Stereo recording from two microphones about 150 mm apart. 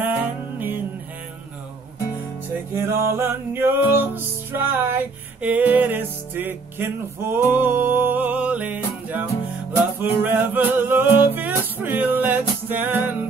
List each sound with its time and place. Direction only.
0.0 s music: 15° right (ahead or behind)
2.7 s music: 15° right (ahead or behind)